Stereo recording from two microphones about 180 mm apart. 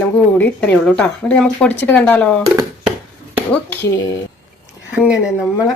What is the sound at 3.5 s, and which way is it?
Speech, 10° left (ahead or behind).